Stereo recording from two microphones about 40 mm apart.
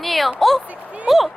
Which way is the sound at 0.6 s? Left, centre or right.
Right.